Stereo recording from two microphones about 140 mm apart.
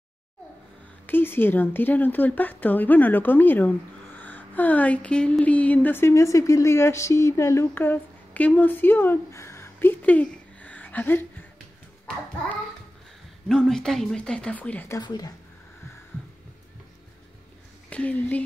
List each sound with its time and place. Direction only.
1.0 s speech: 15° left (ahead or behind)
13.5 s speech: 5° left (ahead or behind)
15.0 s speech: 30° left (ahead or behind)
17.8 s speech: 10° left (ahead or behind)